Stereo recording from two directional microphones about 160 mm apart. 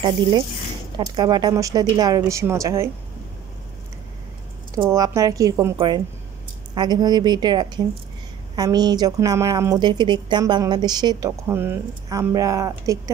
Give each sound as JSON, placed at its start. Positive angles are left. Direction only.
{"t": 0.9, "sound": "a woman's voice", "side_deg": -25}
{"t": 4.7, "sound": "a woman's voice", "side_deg": -20}